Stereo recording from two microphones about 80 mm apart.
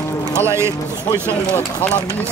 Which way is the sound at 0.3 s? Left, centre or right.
Right.